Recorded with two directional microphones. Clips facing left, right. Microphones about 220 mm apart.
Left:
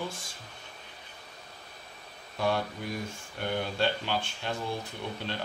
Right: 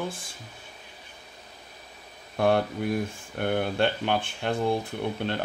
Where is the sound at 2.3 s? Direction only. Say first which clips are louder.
Right 6 dB; 55° right (ahead or behind).